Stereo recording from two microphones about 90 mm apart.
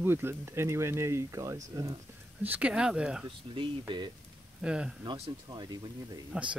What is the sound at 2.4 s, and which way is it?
Speech, 20° right (ahead or behind).